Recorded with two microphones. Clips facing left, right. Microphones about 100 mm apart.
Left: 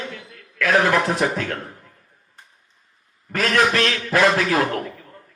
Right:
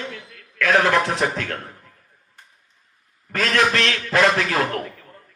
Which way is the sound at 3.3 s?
30° left (ahead or behind).